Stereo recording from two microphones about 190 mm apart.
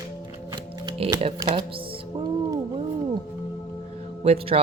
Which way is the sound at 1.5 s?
30° right (ahead or behind).